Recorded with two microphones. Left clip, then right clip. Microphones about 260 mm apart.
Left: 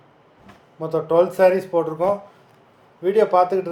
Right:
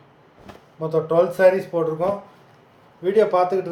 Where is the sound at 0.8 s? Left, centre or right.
Centre.